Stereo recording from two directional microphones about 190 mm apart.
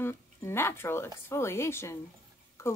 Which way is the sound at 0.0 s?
15° left (ahead or behind).